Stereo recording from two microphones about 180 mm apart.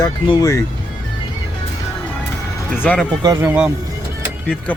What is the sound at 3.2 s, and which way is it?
Speech, 15° right (ahead or behind).